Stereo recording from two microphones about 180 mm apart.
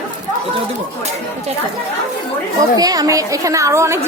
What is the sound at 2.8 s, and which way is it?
A child's voice, 20° right (ahead or behind).